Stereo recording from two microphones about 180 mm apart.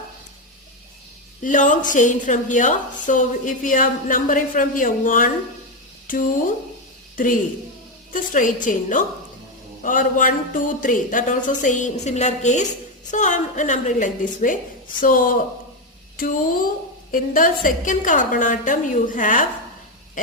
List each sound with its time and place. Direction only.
1.4 s a woman's voice: 45° left (ahead or behind)
8.1 s a woman's voice: 45° left (ahead or behind)